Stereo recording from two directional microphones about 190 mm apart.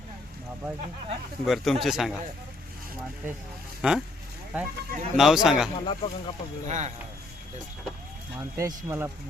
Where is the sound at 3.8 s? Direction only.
5° right (ahead or behind).